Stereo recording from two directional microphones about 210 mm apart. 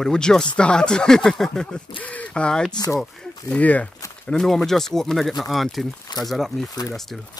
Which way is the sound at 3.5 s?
5° left (ahead or behind).